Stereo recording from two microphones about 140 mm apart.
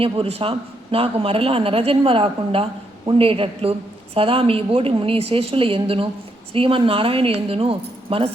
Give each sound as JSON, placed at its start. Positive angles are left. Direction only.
{"t": 0.0, "sound": "a man's voice", "side_deg": -45}